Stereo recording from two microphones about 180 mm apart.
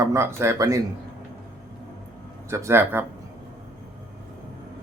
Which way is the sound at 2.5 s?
15° right (ahead or behind).